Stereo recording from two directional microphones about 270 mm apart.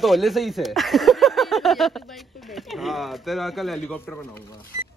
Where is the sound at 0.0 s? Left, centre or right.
Centre.